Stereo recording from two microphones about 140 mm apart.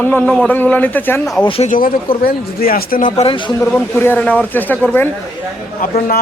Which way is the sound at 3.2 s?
35° left (ahead or behind).